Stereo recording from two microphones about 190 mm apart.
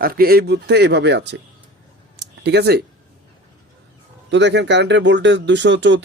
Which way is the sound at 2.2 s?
65° right (ahead or behind).